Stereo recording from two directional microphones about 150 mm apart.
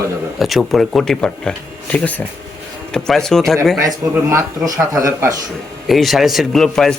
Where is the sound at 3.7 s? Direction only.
20° right (ahead or behind).